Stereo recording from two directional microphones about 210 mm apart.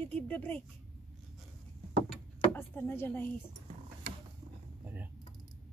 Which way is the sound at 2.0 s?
10° left (ahead or behind).